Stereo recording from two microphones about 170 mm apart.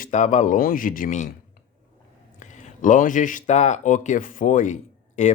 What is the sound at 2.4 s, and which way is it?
Speech, 45° left (ahead or behind).